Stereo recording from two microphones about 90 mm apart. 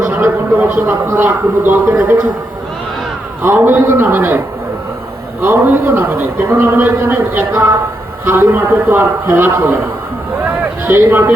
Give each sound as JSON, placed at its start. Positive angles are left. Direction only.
{"t": 0.0, "sound": "a sound", "side_deg": -25}
{"t": 0.9, "sound": "a man's voice", "side_deg": -25}
{"t": 3.4, "sound": "a man's voice", "side_deg": -25}
{"t": 5.4, "sound": "a man's voice", "side_deg": -25}
{"t": 10.8, "sound": "a man's voice", "side_deg": -25}